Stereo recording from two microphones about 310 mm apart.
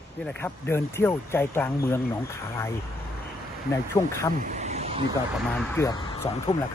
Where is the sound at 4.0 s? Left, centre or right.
Centre.